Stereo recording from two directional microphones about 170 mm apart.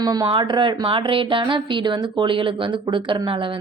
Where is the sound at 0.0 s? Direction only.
25° right (ahead or behind).